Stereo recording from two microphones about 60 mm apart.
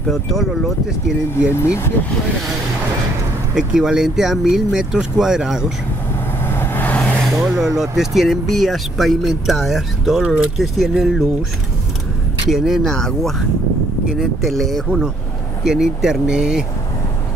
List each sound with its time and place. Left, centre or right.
0.1 s speech: centre
1.5 s speech: left
3.5 s speech: centre
6.4 s vehicle: left
7.2 s speech: centre
10.2 s speech: centre
10.6 s speech: centre
12.4 s speech: centre
12.8 s speech: centre
14.4 s speech: centre
15.6 s speech: centre